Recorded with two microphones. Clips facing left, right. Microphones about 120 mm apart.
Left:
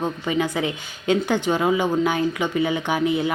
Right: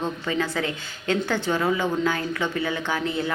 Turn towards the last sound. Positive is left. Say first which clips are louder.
# left 5 dB
turn(degrees=15)  # may be behind; listen again after turning